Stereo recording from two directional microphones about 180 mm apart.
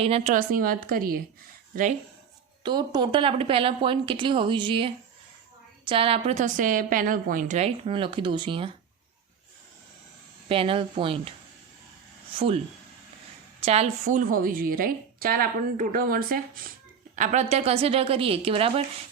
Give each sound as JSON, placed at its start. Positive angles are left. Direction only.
{"t": 0.0, "sound": "speech", "side_deg": -35}
{"t": 0.3, "sound": "a woman's voice", "side_deg": -50}
{"t": 2.6, "sound": "a woman's voice", "side_deg": -25}
{"t": 7.9, "sound": "speech", "side_deg": -30}
{"t": 10.5, "sound": "speech", "side_deg": -30}
{"t": 13.6, "sound": "a woman's voice", "side_deg": -35}
{"t": 17.2, "sound": "speech", "side_deg": -40}